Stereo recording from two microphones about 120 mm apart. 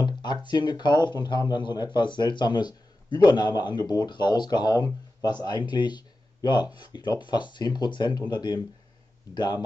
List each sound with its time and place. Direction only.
0.0 s speech: 40° left (ahead or behind)
0.9 s speech: 20° right (ahead or behind)
1.2 s speech: 35° left (ahead or behind)